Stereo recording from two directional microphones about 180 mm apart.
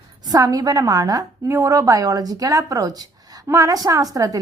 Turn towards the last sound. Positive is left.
turn(degrees=-20)  # may be behind; listen again after turning